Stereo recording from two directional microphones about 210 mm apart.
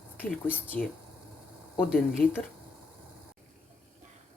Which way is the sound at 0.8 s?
40° left (ahead or behind).